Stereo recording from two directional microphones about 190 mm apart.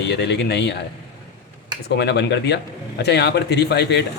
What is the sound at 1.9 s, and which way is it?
Speech, 65° left (ahead or behind).